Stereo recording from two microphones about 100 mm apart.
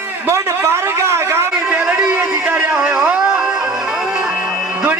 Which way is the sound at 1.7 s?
10° right (ahead or behind).